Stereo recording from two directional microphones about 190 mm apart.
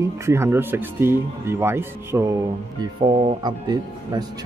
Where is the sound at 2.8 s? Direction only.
30° right (ahead or behind).